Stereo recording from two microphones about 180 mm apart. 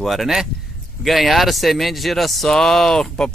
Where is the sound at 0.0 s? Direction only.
Centre (ahead or behind).